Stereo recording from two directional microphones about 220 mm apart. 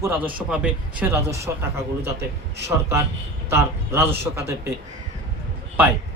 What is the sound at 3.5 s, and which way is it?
Speech, 10° right (ahead or behind).